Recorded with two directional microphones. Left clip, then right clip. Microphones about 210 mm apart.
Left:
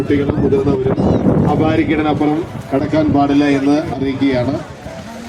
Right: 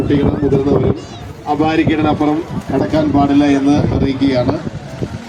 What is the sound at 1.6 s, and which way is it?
A man's voice, 45° right (ahead or behind).